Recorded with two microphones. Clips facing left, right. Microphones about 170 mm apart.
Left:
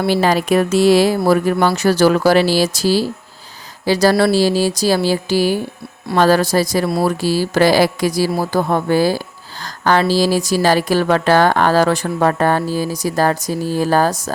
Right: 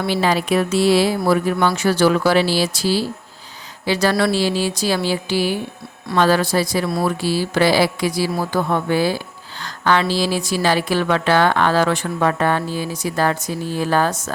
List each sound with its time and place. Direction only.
0.0 s a woman's voice: 45° left (ahead or behind)